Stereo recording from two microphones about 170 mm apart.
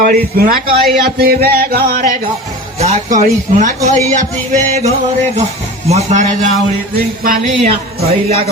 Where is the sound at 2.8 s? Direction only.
40° right (ahead or behind).